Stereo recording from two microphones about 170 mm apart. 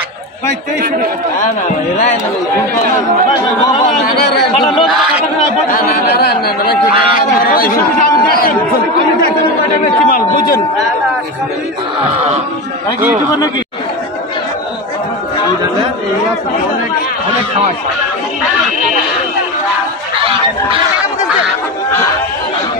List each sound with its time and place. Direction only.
5.7 s speech: 60° left (ahead or behind)
7.5 s speech: 60° left (ahead or behind)
10.0 s speech: 55° left (ahead or behind)